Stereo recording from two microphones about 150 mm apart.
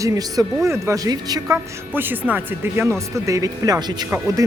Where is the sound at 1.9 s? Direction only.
15° right (ahead or behind).